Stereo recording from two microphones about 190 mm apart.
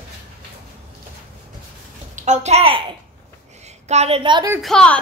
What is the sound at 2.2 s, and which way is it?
A woman's voice, 35° right (ahead or behind).